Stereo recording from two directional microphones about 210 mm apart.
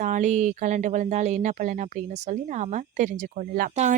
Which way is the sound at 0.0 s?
35° right (ahead or behind).